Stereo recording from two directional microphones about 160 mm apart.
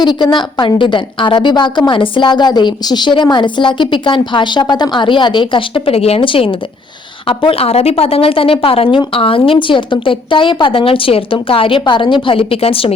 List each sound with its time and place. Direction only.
0.0 s a woman's voice: 30° left (ahead or behind)